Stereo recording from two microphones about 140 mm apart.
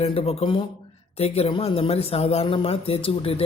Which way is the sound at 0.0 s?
45° left (ahead or behind).